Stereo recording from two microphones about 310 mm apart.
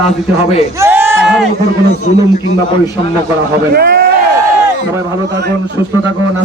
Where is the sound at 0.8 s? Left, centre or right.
Centre.